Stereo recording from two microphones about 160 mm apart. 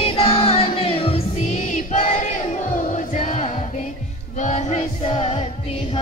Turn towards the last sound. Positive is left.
turn(degrees=40)  # may be behind; listen again after turning